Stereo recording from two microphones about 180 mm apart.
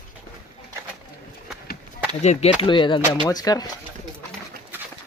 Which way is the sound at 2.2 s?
40° left (ahead or behind).